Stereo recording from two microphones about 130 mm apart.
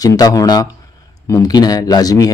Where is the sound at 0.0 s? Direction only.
30° left (ahead or behind).